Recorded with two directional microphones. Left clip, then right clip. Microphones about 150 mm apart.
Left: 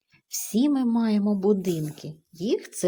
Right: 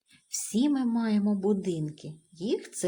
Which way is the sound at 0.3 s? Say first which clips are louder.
Left 3 dB; 30° left (ahead or behind).